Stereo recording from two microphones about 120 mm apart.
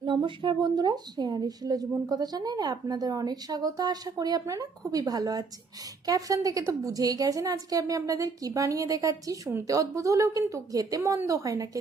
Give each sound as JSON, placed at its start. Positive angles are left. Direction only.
{"t": 0.0, "sound": "a woman's voice", "side_deg": -45}